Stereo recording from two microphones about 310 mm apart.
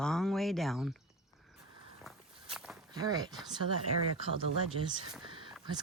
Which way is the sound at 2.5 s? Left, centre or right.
Centre.